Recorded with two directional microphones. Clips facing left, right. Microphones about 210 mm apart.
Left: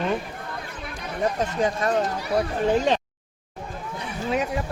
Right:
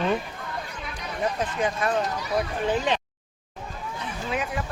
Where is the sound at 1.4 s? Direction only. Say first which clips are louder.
Left 2 dB; 40° left (ahead or behind).